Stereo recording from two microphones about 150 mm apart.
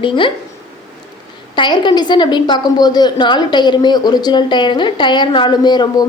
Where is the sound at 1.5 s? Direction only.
30° left (ahead or behind).